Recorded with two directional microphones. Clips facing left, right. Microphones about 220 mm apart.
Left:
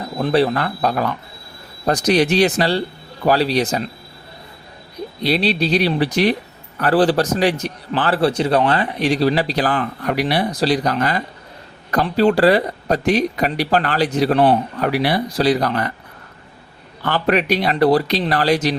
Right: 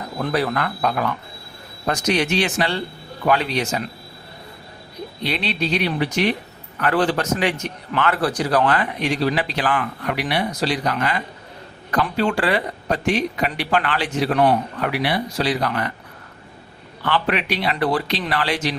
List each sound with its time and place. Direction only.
0.2 s a man's voice: 25° left (ahead or behind)
5.2 s a man's voice: 35° left (ahead or behind)
17.0 s a man's voice: 40° left (ahead or behind)